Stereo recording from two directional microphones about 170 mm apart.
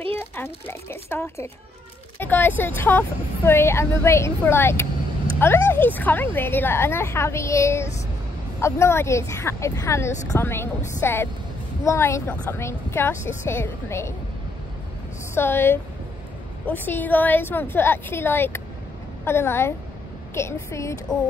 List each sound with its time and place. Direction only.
0.1 s speech: 10° left (ahead or behind)
15.3 s speech: 15° left (ahead or behind)